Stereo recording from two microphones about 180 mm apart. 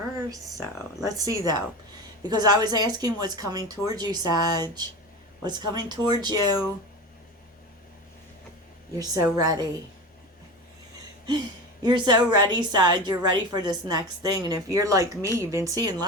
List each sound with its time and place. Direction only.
1.0 s a woman's voice: 20° right (ahead or behind)
9.0 s a woman's voice: 20° right (ahead or behind)
11.8 s a woman's voice: 25° right (ahead or behind)